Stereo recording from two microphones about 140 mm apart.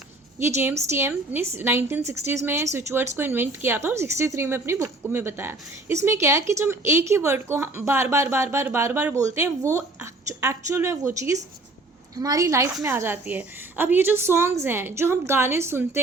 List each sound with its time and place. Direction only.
0.3 s a woman's voice: 15° right (ahead or behind)